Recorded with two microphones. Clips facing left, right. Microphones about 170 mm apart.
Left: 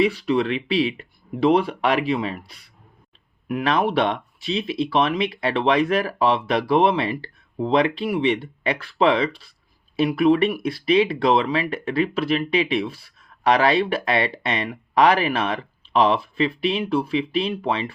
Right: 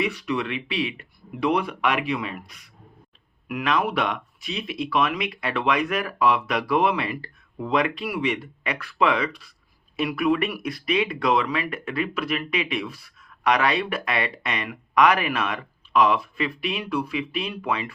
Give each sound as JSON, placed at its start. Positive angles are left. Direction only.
{"t": 0.0, "sound": "speech", "side_deg": 30}